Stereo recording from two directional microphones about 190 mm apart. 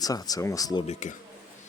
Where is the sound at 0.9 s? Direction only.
40° left (ahead or behind).